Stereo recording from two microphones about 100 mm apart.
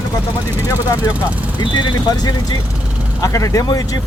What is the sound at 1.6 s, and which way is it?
Speech, 45° left (ahead or behind).